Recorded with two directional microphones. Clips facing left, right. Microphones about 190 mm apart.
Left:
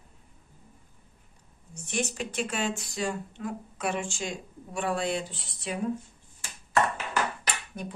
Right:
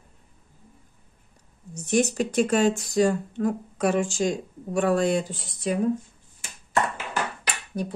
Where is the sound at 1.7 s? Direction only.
40° right (ahead or behind).